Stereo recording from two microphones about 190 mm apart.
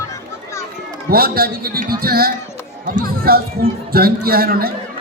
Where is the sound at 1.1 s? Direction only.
50° right (ahead or behind).